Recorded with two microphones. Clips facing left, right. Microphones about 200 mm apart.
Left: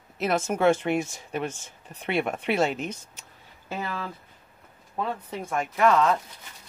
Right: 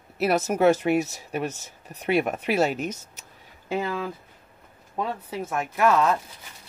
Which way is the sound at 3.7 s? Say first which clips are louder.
Right 5 dB; 15° right (ahead or behind).